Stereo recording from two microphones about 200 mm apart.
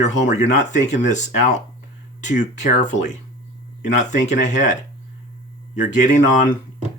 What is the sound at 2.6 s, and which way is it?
Speech, 35° left (ahead or behind).